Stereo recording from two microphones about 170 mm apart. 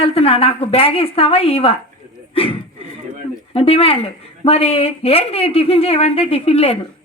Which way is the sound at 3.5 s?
35° left (ahead or behind).